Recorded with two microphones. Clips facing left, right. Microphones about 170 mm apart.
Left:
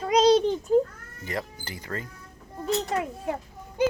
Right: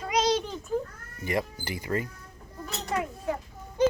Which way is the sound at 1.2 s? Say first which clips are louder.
Right 4 dB; 10° right (ahead or behind).